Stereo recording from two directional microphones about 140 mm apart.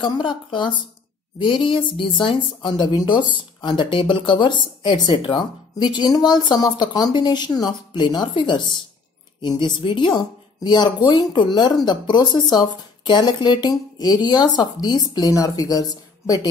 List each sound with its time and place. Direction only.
0.0 s speech: 35° left (ahead or behind)